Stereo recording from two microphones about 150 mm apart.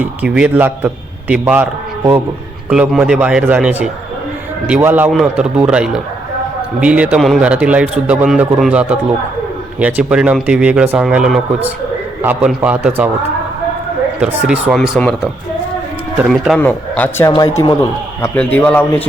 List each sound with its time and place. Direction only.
0.0 s speech: 10° right (ahead or behind)
2.6 s a man's voice: 5° right (ahead or behind)
14.2 s speech: 5° right (ahead or behind)
16.3 s a man's voice: centre (ahead or behind)
16.6 s a man's voice: 10° left (ahead or behind)
18.2 s a man's voice: 10° left (ahead or behind)